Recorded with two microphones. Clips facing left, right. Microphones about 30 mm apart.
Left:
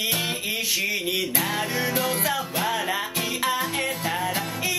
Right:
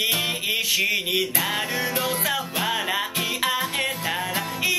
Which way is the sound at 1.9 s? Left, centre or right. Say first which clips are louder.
Even; right.